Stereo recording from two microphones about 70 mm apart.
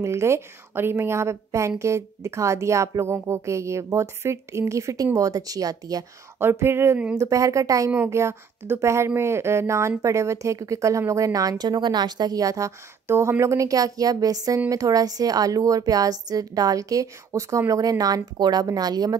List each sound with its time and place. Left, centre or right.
0.0 s speech: right
6.4 s speech: right
7.2 s speech: right
8.1 s a woman's voice: right